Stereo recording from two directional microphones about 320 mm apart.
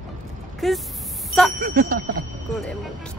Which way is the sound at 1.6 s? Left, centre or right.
Right.